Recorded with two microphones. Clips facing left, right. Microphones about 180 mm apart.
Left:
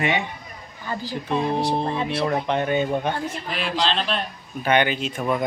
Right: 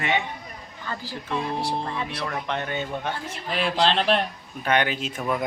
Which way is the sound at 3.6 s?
55° right (ahead or behind).